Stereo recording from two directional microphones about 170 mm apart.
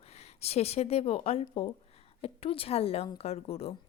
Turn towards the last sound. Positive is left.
turn(degrees=35)  # may be behind; listen again after turning